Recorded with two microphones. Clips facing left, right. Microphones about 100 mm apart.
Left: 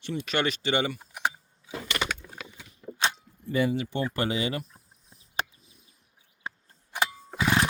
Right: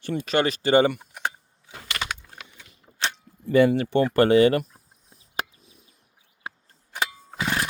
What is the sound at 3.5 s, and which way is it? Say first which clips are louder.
Speech: right 8 dB; 65° right (ahead or behind).